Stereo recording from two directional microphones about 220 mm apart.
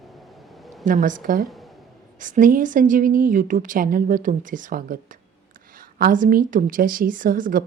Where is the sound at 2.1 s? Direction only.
35° right (ahead or behind).